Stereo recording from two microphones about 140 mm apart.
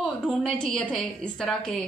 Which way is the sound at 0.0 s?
5° left (ahead or behind).